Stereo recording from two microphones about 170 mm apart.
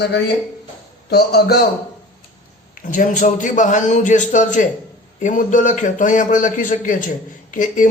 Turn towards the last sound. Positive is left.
turn(degrees=50)  # may be behind; listen again after turning